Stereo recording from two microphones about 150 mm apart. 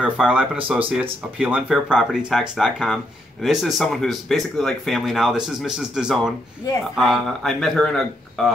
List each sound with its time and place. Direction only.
0.0 s speech: 10° right (ahead or behind)
6.7 s speech: 25° left (ahead or behind)
7.0 s speech: centre (ahead or behind)